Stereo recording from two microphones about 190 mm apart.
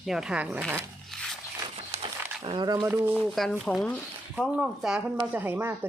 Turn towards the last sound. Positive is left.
turn(degrees=-10)  # may be behind; listen again after turning